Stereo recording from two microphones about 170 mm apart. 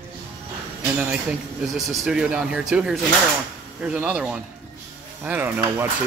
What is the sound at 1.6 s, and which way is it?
Speech, centre (ahead or behind).